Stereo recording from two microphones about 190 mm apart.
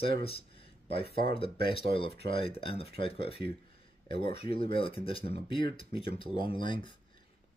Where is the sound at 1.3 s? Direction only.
30° left (ahead or behind).